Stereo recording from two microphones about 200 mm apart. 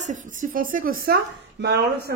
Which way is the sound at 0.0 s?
40° right (ahead or behind).